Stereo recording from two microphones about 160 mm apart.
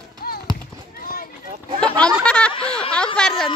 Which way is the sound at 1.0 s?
65° left (ahead or behind).